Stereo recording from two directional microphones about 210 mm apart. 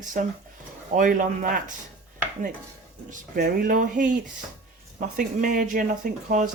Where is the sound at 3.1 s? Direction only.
40° right (ahead or behind).